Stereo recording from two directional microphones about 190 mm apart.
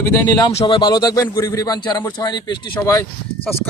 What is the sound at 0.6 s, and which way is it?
A man's voice, 25° left (ahead or behind).